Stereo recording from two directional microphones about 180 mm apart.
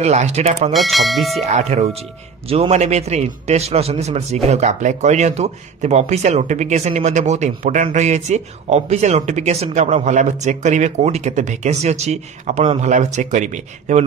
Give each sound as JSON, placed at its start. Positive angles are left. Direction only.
{"t": 0.0, "sound": "a man's voice", "side_deg": -40}
{"t": 0.7, "sound": "speech", "side_deg": 0}
{"t": 1.4, "sound": "a man's voice", "side_deg": -40}